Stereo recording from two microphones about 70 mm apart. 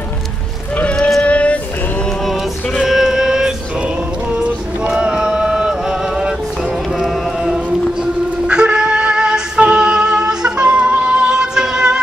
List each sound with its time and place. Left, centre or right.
0.7 s a sound: centre
2.0 s music: centre
6.9 s fowl: centre